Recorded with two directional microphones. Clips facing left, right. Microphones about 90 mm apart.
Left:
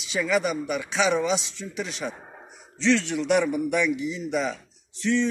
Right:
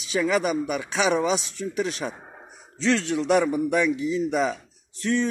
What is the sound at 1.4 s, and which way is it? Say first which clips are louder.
Speech: right 6 dB; 45° right (ahead or behind).